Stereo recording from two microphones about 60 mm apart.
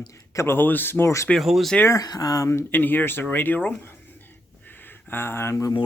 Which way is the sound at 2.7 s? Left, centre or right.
Left.